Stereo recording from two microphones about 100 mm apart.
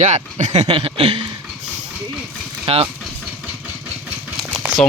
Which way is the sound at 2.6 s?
65° right (ahead or behind).